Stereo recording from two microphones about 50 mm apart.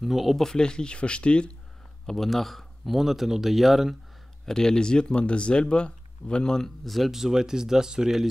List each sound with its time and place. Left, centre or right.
0.0 s speech: centre
0.5 s speech: centre
2.0 s speech: centre
4.5 s speech: centre